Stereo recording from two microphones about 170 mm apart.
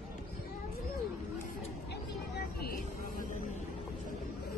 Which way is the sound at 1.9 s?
70° left (ahead or behind).